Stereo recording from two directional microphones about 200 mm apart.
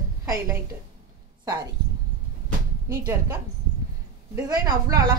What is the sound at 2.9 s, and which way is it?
Speech, 15° right (ahead or behind).